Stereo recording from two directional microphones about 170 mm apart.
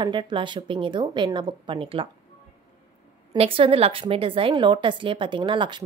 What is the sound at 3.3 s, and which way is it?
A woman's voice, 35° right (ahead or behind).